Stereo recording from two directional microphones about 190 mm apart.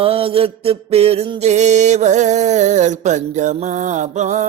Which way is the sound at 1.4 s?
35° right (ahead or behind).